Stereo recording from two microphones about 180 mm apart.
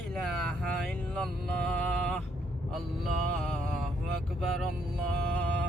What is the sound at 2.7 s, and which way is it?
Mantra, centre (ahead or behind).